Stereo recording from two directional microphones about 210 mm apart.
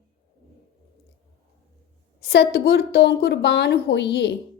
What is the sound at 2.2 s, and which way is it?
A woman's voice, 50° left (ahead or behind).